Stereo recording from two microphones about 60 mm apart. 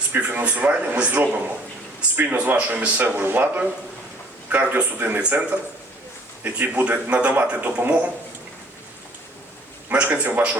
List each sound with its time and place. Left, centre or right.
0.4 s a man's voice: right
3.2 s a man's voice: right
9.9 s a man's voice: right